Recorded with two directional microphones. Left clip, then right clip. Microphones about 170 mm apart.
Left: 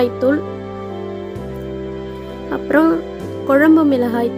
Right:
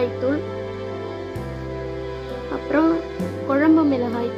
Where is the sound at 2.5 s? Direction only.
40° left (ahead or behind).